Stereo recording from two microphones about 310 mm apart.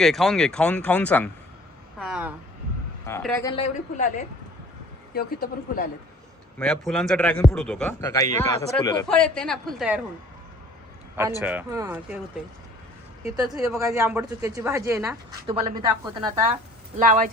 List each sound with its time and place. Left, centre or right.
0.0 s a man's voice: centre
3.5 s speech: left
5.1 s speech: left
6.6 s a man's voice: centre
11.4 s a man's voice: centre
13.5 s a woman's voice: centre; by 17.2 s right